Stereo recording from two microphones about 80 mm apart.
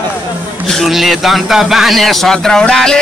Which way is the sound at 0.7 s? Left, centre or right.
Centre.